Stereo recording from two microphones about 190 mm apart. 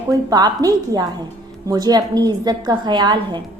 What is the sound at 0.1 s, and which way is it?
A woman's voice, 20° right (ahead or behind).